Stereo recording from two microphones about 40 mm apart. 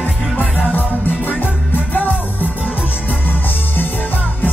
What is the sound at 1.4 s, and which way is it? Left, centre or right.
Music, left.